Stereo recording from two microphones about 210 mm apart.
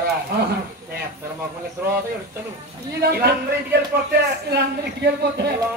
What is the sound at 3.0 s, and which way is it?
A man's voice, 50° right (ahead or behind).